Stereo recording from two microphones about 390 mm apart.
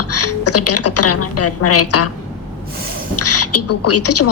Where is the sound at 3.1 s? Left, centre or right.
Left.